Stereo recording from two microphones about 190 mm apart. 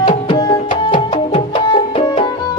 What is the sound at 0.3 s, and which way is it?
Tabla, 20° left (ahead or behind).